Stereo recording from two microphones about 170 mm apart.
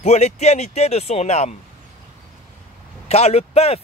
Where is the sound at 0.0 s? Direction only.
40° left (ahead or behind).